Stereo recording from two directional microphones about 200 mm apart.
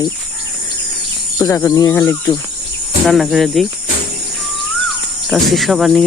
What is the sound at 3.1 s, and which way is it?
Speech, centre (ahead or behind).